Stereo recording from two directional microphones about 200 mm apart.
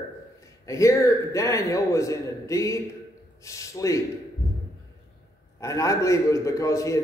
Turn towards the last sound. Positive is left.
turn(degrees=15)  # may be behind; listen again after turning